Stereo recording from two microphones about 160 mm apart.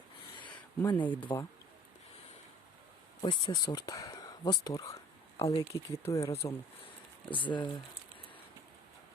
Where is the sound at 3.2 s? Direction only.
25° left (ahead or behind).